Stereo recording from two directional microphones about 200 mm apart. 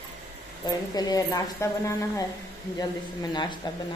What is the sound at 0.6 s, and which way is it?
Speech, 20° left (ahead or behind).